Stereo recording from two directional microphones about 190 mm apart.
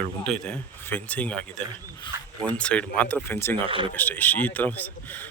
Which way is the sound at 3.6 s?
25° right (ahead or behind).